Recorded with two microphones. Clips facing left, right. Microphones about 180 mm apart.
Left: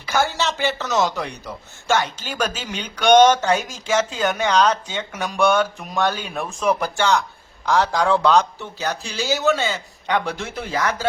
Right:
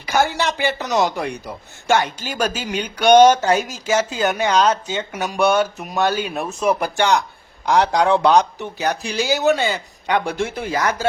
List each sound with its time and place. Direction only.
0.0 s speech: 15° right (ahead or behind)